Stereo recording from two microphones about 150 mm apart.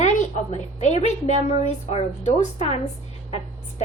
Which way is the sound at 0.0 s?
55° left (ahead or behind).